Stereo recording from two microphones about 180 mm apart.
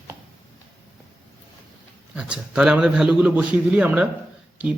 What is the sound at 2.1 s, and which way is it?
A man's voice, 5° right (ahead or behind).